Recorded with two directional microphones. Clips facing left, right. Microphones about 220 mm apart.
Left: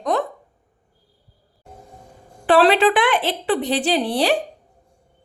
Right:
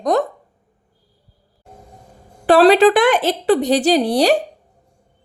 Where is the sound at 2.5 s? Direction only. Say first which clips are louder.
Right 5 dB; 40° right (ahead or behind).